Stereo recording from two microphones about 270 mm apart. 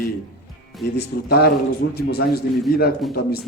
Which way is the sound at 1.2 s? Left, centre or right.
Left.